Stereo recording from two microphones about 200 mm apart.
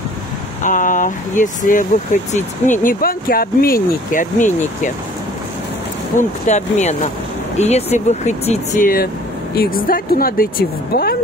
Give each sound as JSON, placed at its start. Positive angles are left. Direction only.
{"t": 0.7, "sound": "speech", "side_deg": 40}
{"t": 6.1, "sound": "speech", "side_deg": 35}